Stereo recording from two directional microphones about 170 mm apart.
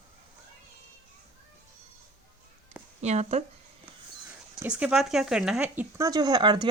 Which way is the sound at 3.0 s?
40° right (ahead or behind).